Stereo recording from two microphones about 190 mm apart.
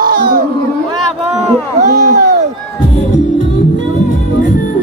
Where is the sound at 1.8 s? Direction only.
40° right (ahead or behind).